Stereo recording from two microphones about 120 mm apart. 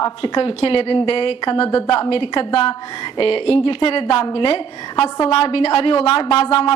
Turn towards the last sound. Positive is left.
turn(degrees=55)  # may be behind; listen again after turning